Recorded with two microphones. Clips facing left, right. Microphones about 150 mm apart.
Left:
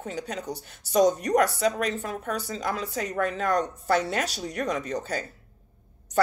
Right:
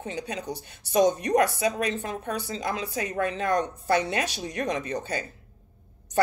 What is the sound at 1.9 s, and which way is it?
Speech, 25° right (ahead or behind).